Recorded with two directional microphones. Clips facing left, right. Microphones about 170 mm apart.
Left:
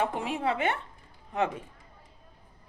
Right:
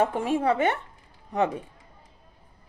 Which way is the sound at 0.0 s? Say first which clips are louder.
Right 5 dB; 45° right (ahead or behind).